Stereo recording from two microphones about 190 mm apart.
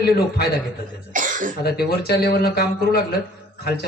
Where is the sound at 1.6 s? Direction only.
55° left (ahead or behind).